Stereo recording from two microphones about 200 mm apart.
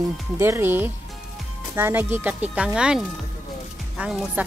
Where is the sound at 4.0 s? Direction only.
5° right (ahead or behind).